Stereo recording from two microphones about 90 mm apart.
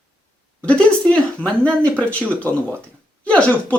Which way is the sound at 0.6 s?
15° left (ahead or behind).